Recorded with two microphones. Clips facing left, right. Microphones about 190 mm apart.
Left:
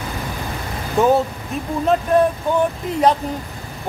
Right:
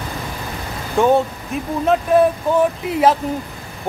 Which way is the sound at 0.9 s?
Centre (ahead or behind).